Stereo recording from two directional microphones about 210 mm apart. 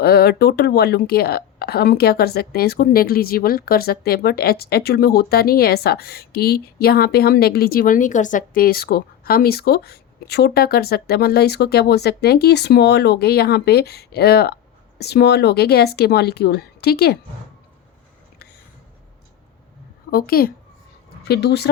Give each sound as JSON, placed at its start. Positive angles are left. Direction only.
{"t": 0.0, "sound": "speech", "side_deg": 50}
{"t": 20.1, "sound": "a woman's voice", "side_deg": 45}